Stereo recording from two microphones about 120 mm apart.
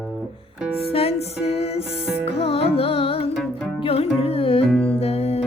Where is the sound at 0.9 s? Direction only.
55° left (ahead or behind).